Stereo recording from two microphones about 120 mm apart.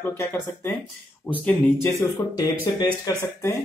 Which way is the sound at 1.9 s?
25° left (ahead or behind).